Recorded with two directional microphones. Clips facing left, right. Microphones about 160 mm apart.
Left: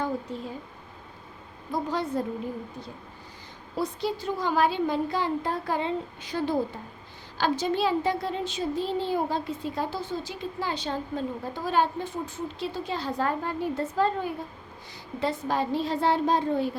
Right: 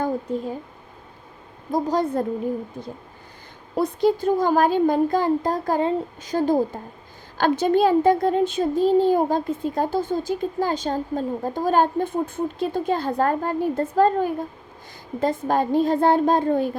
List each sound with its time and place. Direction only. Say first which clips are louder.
1.7 s a child's voice: right 6 dB; 45° right (ahead or behind)
3.8 s a child's voice: right 9 dB; 50° right (ahead or behind)